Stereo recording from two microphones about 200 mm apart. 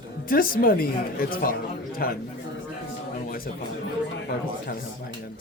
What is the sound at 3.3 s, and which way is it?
Speech, 45° left (ahead or behind).